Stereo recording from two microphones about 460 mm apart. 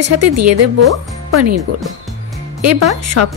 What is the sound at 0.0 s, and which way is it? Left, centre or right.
Speech, right.